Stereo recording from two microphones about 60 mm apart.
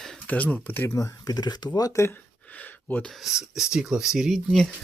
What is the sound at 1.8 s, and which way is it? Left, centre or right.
Speech, left.